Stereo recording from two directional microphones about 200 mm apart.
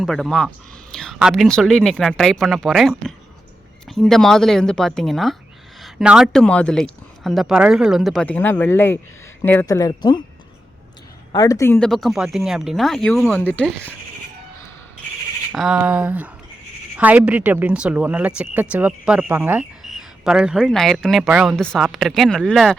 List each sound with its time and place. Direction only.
0.0 s speech: centre (ahead or behind); by 10.2 s 20° left (ahead or behind)
11.3 s speech: 20° left (ahead or behind)
15.5 s speech: 5° right (ahead or behind)